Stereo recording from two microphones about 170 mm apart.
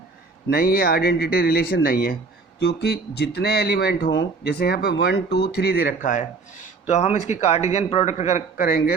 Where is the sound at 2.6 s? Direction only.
80° left.